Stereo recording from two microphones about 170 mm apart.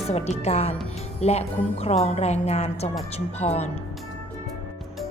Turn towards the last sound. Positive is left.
turn(degrees=40)  # may be behind; listen again after turning